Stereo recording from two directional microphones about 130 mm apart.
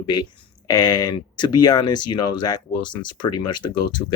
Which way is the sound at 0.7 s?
30° left (ahead or behind).